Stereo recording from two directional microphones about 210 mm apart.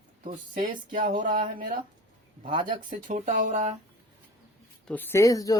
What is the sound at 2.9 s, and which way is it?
Speech, 40° right (ahead or behind).